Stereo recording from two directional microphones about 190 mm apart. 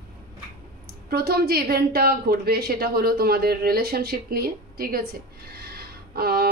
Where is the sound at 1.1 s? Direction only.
55° right (ahead or behind).